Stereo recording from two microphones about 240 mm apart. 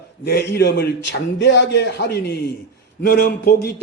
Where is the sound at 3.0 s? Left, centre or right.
Left.